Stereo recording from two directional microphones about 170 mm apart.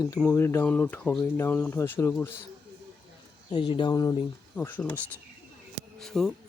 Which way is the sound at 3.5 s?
30° left (ahead or behind).